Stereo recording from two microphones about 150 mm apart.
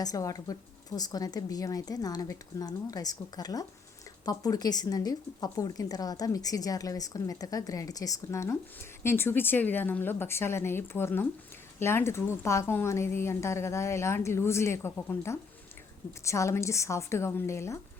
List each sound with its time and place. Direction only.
0.0 s a woman's voice: 25° left (ahead or behind)